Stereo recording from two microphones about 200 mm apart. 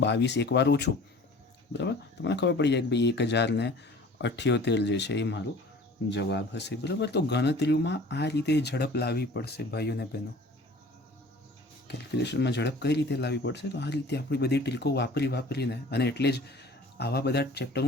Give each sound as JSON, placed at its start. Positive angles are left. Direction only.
{"t": 0.0, "sound": "speech", "side_deg": 60}
{"t": 11.9, "sound": "speech", "side_deg": 60}